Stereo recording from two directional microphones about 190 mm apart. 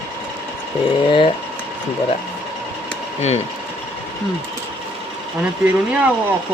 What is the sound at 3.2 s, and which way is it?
Speech, 35° left (ahead or behind).